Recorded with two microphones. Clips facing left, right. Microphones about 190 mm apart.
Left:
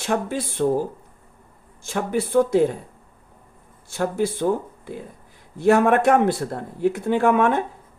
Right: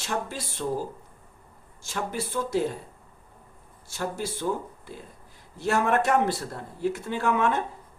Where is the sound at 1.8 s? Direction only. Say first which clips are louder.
Left 7 dB; 55° left (ahead or behind).